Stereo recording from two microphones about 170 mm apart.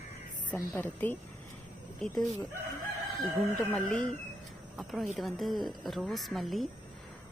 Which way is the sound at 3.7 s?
5° left (ahead or behind).